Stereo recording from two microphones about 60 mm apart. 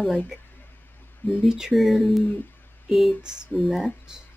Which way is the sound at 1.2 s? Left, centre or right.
Left.